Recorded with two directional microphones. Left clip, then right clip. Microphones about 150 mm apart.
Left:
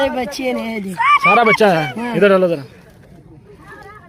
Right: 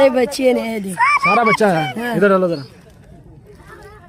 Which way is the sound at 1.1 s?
35° right (ahead or behind).